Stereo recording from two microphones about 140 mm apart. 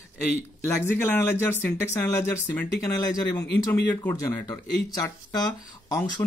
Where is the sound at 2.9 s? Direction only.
25° left (ahead or behind).